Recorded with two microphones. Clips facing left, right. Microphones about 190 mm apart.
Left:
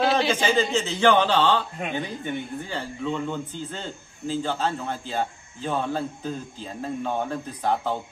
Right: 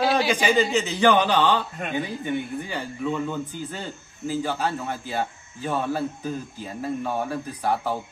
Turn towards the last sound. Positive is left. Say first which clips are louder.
# even
turn(degrees=-5)  # may be behind; listen again after turning